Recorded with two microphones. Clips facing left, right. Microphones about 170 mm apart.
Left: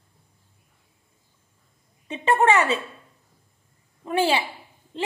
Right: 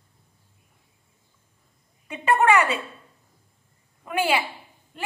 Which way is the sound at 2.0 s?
25° left (ahead or behind).